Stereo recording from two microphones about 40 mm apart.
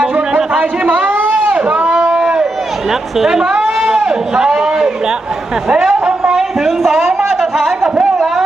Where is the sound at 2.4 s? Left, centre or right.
Centre.